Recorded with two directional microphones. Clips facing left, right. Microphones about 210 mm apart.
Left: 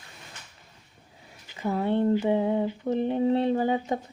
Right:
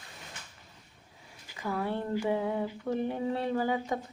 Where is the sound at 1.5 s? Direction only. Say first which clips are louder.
Left 7 dB; 25° left (ahead or behind).